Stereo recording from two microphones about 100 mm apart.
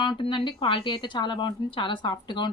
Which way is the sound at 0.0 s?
55° left (ahead or behind).